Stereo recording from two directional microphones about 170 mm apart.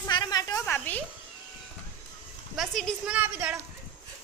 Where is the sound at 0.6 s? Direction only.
10° left (ahead or behind).